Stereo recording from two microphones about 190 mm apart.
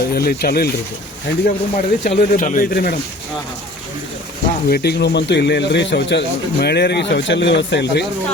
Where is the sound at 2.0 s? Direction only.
45° left (ahead or behind).